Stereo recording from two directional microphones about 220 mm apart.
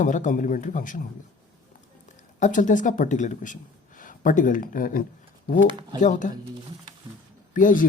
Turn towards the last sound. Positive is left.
turn(degrees=35)  # may be behind; listen again after turning